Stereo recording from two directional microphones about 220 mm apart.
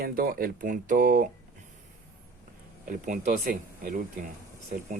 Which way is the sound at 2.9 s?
40° right (ahead or behind).